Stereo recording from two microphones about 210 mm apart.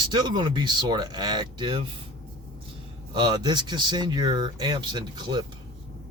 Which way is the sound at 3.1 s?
20° right (ahead or behind).